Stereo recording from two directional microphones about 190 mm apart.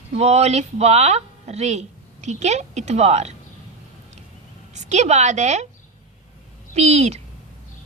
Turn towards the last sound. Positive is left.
turn(degrees=-35)  # may be behind; listen again after turning